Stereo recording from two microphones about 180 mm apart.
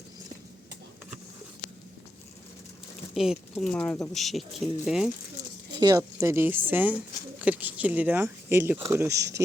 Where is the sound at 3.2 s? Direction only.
Centre (ahead or behind).